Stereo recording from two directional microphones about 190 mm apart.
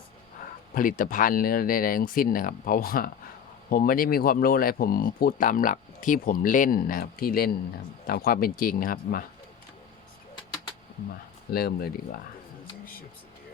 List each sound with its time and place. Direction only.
0.7 s speech: 45° left (ahead or behind)
11.5 s speech: 55° left (ahead or behind)
12.8 s a sound: 50° left (ahead or behind)